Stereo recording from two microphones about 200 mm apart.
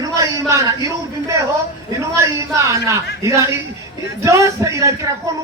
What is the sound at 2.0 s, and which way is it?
A man's voice, 15° right (ahead or behind).